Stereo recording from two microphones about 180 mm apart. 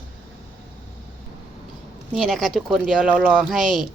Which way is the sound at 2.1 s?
Centre (ahead or behind).